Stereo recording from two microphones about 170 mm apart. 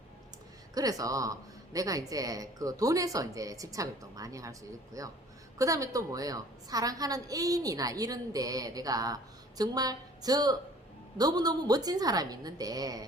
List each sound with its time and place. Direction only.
0.7 s a woman's voice: 20° right (ahead or behind)